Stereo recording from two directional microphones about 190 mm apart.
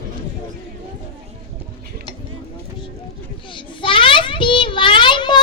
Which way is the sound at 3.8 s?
25° left (ahead or behind).